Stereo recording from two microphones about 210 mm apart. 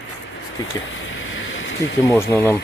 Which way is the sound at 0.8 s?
65° left (ahead or behind).